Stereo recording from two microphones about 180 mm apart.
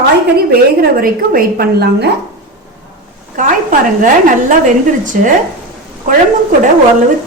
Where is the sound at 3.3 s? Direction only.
45° right (ahead or behind).